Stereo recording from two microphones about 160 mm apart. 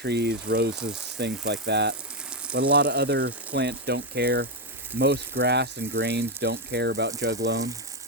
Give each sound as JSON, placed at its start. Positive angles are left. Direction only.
{"t": 0.0, "sound": "speech", "side_deg": -90}
{"t": 2.6, "sound": "speech", "side_deg": -75}